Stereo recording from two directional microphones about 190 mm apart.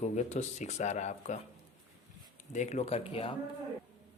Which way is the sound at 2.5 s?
40° left (ahead or behind).